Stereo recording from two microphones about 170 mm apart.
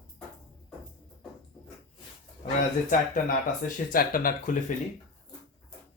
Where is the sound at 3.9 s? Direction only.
60° left (ahead or behind).